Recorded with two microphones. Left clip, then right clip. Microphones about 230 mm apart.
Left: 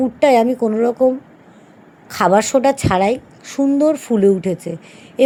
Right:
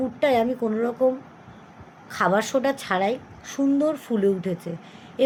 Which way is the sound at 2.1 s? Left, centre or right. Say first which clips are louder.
Left 8 dB; left.